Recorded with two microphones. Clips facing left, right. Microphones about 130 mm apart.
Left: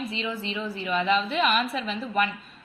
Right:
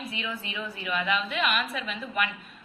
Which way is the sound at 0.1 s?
25° left (ahead or behind).